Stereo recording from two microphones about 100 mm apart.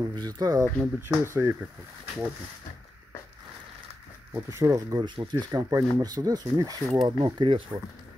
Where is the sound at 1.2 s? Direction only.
25° right (ahead or behind).